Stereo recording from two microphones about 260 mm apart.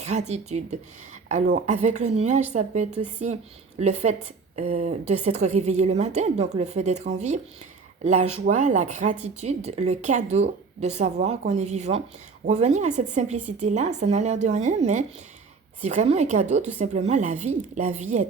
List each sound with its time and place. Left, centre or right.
0.0 s a woman's voice: right